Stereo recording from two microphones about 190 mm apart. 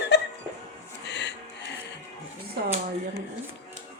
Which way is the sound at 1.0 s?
65° left (ahead or behind).